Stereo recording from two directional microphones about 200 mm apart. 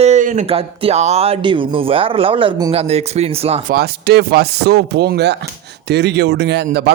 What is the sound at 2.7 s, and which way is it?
Speech, 30° right (ahead or behind).